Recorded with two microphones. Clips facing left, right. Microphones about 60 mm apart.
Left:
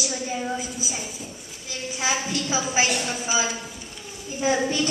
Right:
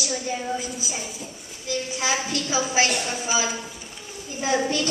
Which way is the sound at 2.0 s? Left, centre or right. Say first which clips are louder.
Left 2 dB; centre.